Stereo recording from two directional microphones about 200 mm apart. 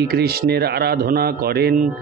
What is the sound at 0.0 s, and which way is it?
Speech, 50° right (ahead or behind).